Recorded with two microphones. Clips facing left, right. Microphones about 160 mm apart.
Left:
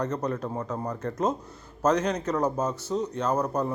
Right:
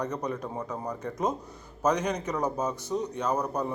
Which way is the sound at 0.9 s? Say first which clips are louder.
Left 2 dB; 10° right (ahead or behind).